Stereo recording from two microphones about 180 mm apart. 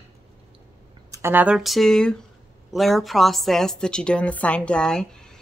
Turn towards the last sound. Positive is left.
turn(degrees=5)  # may be behind; listen again after turning